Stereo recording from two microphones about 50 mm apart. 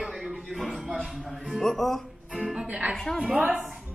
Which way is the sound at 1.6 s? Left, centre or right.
Centre.